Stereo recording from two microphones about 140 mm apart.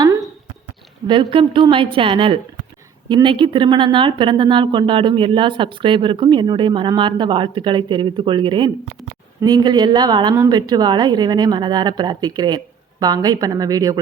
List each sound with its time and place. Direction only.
1.0 s speech: 35° right (ahead or behind)